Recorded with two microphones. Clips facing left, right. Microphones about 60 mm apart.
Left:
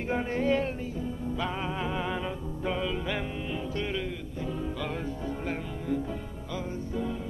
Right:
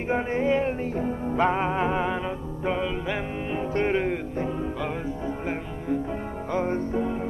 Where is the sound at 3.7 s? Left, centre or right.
Right.